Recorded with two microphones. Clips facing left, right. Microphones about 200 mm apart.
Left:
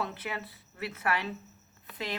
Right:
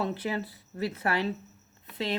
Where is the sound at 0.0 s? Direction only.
30° right (ahead or behind).